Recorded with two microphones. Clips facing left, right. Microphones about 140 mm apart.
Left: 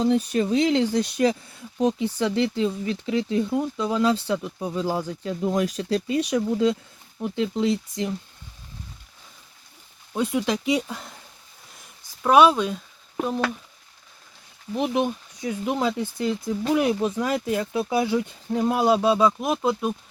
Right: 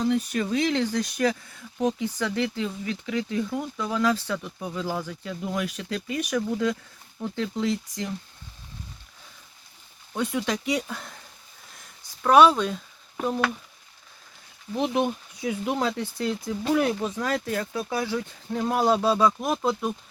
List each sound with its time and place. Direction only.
0.0 s speech: 30° left (ahead or behind)
10.2 s speech: 10° left (ahead or behind)
12.2 s speech: 10° left (ahead or behind)
14.7 s speech: 5° left (ahead or behind)